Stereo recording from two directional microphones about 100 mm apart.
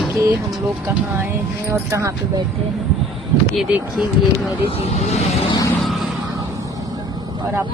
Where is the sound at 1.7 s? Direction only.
30° right (ahead or behind).